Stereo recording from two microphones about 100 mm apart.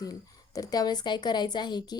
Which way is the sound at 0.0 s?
40° left (ahead or behind).